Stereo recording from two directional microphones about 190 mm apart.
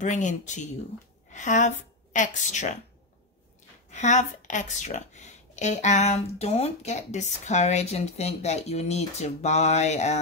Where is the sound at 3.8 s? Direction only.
40° left (ahead or behind).